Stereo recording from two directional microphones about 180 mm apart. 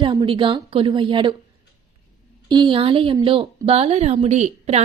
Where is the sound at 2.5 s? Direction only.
25° right (ahead or behind).